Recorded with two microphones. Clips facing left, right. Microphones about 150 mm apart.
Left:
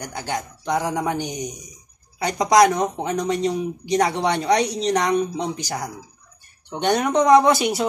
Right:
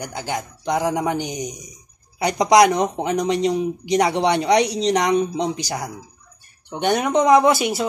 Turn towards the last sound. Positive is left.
turn(degrees=0)  # may be behind; listen again after turning